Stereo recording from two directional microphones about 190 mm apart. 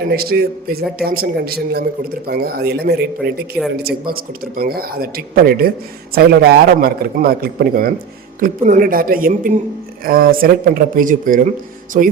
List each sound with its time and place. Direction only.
0.1 s a man's voice: 55° right (ahead or behind)